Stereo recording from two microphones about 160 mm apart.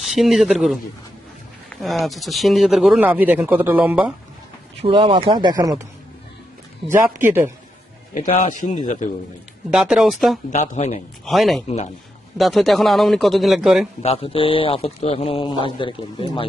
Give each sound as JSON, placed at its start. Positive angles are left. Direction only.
{"t": 0.0, "sound": "speech", "side_deg": 0}
{"t": 1.8, "sound": "speech", "side_deg": 0}
{"t": 4.8, "sound": "speech", "side_deg": -35}
{"t": 6.9, "sound": "speech", "side_deg": -15}
{"t": 8.4, "sound": "a man's voice", "side_deg": 50}
{"t": 9.6, "sound": "speech", "side_deg": -5}
{"t": 10.5, "sound": "a man's voice", "side_deg": 45}
{"t": 11.3, "sound": "speech", "side_deg": 0}
{"t": 14.0, "sound": "a man's voice", "side_deg": 40}